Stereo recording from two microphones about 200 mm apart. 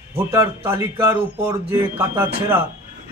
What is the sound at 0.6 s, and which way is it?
Speech, 15° right (ahead or behind).